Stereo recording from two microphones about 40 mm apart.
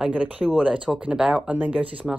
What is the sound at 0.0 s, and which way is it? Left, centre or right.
Speech, right.